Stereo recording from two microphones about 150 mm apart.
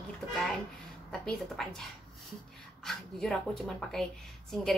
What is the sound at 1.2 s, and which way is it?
Speech, 5° left (ahead or behind).